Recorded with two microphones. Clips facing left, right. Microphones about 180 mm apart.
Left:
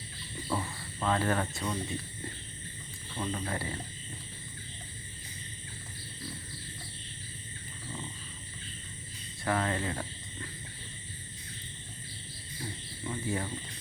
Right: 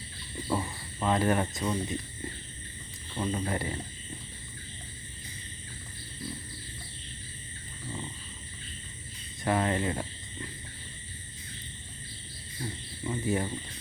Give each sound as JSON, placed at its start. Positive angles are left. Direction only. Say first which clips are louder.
{"t": 0.4, "sound": "speech", "louder": "right 3 dB", "side_deg": -15}
{"t": 3.2, "sound": "speech", "louder": "right 4 dB", "side_deg": -20}
{"t": 9.4, "sound": "speech", "louder": "right 3 dB", "side_deg": -20}
{"t": 13.1, "sound": "speech", "louder": "right 4 dB", "side_deg": -20}